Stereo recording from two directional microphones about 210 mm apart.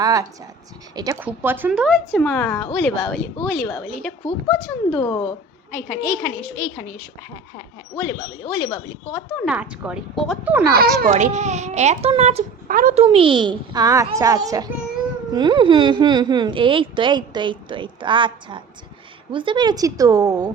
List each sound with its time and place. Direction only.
0.0 s a woman's voice: 15° right (ahead or behind)
1.9 s speech: 5° left (ahead or behind)
8.0 s speech: 20° left (ahead or behind)
9.5 s a woman's voice: 5° right (ahead or behind)
10.8 s a child's voice: 45° right (ahead or behind)
11.1 s a child's voice: 35° right (ahead or behind); by 20.5 s 15° right (ahead or behind)